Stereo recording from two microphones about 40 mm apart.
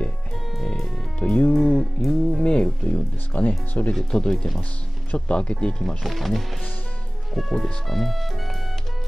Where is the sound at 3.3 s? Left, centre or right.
Left.